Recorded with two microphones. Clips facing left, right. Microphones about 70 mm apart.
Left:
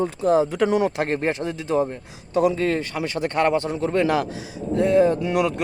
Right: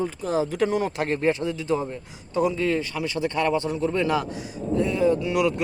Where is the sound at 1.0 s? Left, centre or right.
Left.